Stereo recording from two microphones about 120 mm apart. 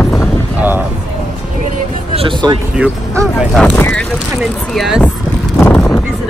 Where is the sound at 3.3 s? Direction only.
Centre (ahead or behind).